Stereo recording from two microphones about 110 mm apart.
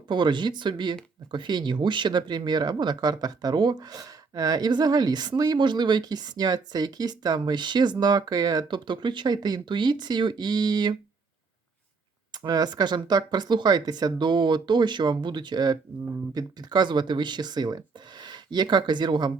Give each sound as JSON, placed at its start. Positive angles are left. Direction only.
{"t": 0.1, "sound": "speech", "side_deg": -45}
{"t": 12.3, "sound": "speech", "side_deg": -35}